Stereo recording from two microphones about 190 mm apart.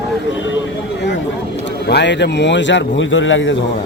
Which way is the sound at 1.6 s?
65° left (ahead or behind).